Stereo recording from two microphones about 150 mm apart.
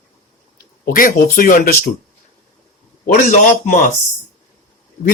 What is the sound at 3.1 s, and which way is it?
Speech, 55° left (ahead or behind).